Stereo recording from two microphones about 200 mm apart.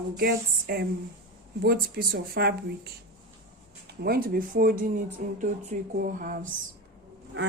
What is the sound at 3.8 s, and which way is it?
Speech, 50° right (ahead or behind).